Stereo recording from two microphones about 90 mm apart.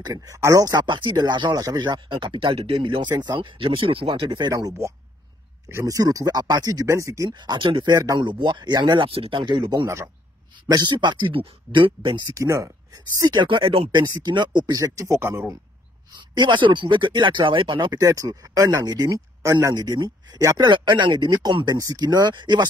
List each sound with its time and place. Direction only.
0.0 s speech: 45° right (ahead or behind); by 4.5 s 65° right (ahead or behind)
4.5 s speech: 50° right (ahead or behind)
5.7 s speech: 30° right (ahead or behind)
7.2 s speech: 60° right (ahead or behind)
7.9 s speech: 45° right (ahead or behind); by 12.1 s 70° right (ahead or behind)
12.4 s speech: 35° right (ahead or behind)
13.3 s speech: 65° right (ahead or behind); by 13.8 s 85° right
13.9 s speech: 55° right (ahead or behind)
15.1 s speech: 25° right (ahead or behind)
16.1 s speech: 55° right (ahead or behind)
17.9 s speech: 40° right (ahead or behind)